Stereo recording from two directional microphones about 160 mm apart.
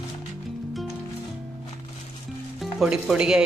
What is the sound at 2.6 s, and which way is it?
Speech, centre (ahead or behind).